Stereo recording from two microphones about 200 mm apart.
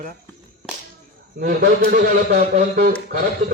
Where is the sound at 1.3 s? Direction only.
50° right (ahead or behind).